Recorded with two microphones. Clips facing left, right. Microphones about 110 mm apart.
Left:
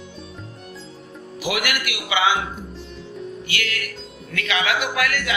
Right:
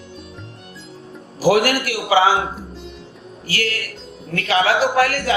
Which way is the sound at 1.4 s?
40° right (ahead or behind).